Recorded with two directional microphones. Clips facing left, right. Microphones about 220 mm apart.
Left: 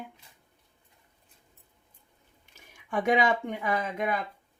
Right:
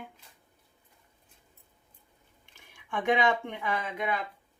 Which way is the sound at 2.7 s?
40° left (ahead or behind).